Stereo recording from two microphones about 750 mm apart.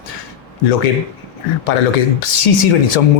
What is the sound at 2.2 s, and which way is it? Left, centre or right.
Speech, left.